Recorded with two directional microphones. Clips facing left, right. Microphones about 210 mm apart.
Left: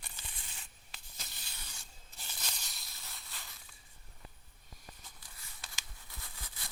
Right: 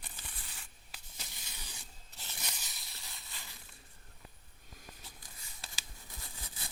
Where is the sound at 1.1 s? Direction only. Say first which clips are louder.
Right 2 dB; 15° right (ahead or behind).